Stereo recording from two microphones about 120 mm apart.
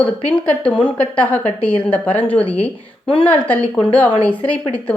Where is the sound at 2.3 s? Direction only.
50° left (ahead or behind).